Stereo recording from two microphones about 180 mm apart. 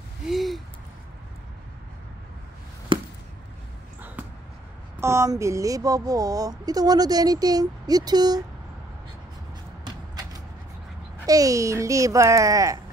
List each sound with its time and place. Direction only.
0.3 s a sound: centre (ahead or behind)
2.9 s chop: 30° right (ahead or behind)
5.0 s speech: 15° right (ahead or behind)
11.2 s speech: 20° right (ahead or behind)